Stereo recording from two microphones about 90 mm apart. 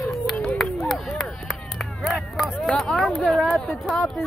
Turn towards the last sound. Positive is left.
turn(degrees=0)  # may be behind; listen again after turning